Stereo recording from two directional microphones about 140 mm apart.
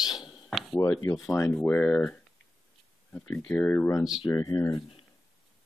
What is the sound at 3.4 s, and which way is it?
Speech, 10° left (ahead or behind).